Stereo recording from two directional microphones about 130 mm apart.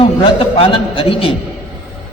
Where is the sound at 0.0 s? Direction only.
45° left (ahead or behind).